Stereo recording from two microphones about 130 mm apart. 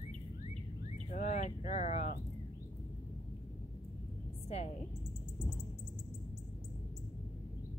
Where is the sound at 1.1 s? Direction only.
65° left (ahead or behind).